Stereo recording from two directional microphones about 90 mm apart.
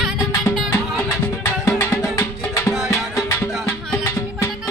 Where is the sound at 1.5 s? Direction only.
30° left (ahead or behind).